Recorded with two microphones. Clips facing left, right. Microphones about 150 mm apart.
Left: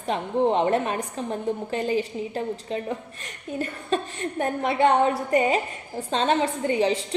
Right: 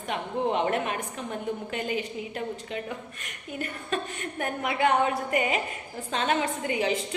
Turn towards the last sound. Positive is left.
turn(degrees=30)  # may be behind; listen again after turning